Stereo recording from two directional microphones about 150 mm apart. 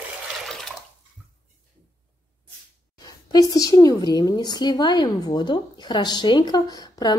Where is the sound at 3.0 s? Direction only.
25° left (ahead or behind).